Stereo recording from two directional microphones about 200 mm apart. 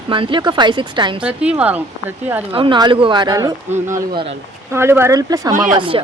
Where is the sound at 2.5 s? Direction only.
25° right (ahead or behind).